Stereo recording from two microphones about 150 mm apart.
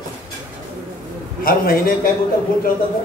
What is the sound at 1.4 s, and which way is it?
Speech, 70° left (ahead or behind).